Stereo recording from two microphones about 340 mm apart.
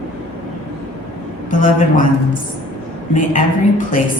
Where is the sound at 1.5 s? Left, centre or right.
Left.